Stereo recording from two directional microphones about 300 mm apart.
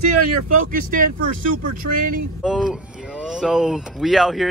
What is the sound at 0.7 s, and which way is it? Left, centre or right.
Speech, right.